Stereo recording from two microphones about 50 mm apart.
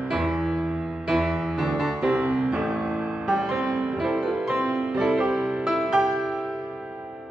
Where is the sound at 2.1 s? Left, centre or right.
Right.